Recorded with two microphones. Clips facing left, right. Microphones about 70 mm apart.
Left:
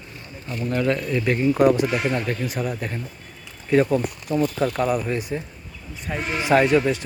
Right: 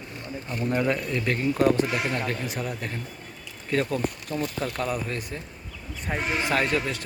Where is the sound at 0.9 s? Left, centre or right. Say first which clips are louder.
Left 4 dB; centre.